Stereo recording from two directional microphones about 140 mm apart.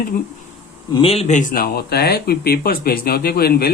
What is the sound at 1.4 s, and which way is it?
Speech, 80° left.